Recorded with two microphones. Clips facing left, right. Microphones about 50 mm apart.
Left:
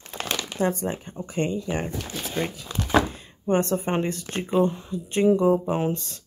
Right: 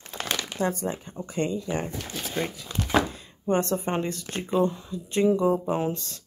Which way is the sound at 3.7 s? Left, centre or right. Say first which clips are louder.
Left 2 dB; centre.